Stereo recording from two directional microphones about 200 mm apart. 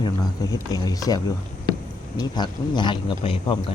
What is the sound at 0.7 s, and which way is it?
Speech, 20° left (ahead or behind).